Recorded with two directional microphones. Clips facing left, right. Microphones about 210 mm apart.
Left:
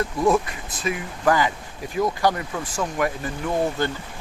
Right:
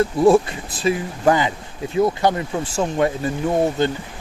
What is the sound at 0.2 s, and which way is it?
Speech, 30° right (ahead or behind).